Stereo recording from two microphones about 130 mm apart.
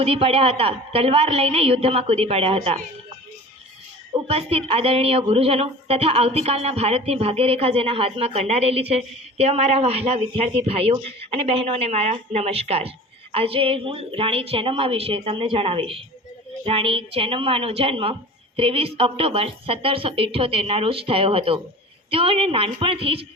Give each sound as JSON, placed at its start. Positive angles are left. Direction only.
{"t": 0.0, "sound": "a woman's voice", "side_deg": -45}
{"t": 4.3, "sound": "a woman's voice", "side_deg": -50}